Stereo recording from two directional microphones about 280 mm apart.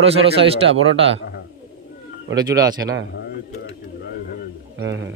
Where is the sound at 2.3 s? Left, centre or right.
Centre.